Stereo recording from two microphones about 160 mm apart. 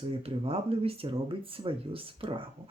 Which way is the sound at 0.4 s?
35° right (ahead or behind).